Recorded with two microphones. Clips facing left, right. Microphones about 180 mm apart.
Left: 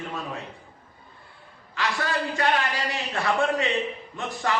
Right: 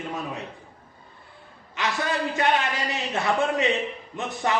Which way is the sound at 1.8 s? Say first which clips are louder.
Right 1 dB; 20° right (ahead or behind).